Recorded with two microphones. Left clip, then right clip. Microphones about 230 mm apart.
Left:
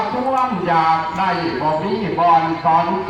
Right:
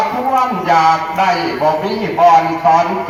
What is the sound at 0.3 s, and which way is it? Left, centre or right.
A man's voice, right.